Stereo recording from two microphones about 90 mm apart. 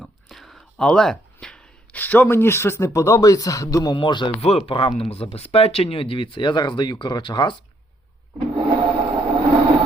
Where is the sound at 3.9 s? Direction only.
60° left (ahead or behind).